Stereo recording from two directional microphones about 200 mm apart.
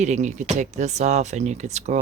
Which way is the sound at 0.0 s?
35° right (ahead or behind).